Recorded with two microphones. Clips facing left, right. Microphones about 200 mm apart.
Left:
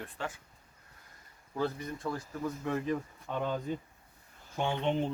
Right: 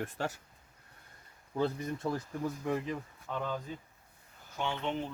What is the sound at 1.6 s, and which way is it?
Speech, 25° right (ahead or behind).